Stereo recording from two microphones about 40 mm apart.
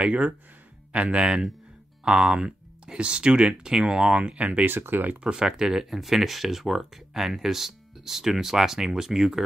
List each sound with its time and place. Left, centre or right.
0.0 s speech: right
4.6 s speech: right
5.2 s speech: centre